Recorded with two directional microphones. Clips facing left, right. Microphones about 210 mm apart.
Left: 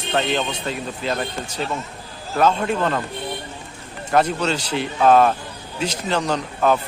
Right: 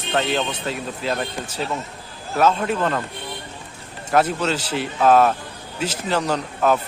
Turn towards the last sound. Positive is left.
turn(degrees=-5)  # may be behind; listen again after turning